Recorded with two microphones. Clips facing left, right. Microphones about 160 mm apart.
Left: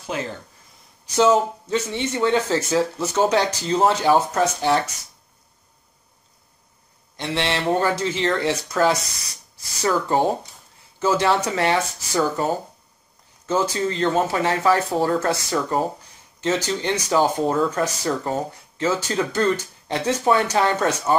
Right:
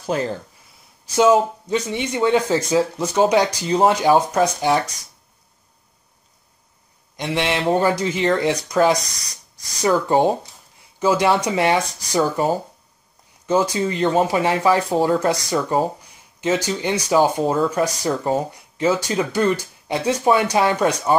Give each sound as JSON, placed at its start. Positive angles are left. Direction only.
{"t": 0.0, "sound": "speech", "side_deg": -35}
{"t": 1.1, "sound": "speech", "side_deg": -10}
{"t": 7.2, "sound": "speech", "side_deg": -15}